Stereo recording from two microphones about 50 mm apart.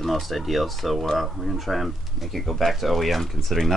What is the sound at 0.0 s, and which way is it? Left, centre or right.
Speech, centre.